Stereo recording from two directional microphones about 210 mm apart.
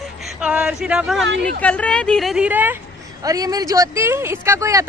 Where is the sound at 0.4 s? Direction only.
5° right (ahead or behind).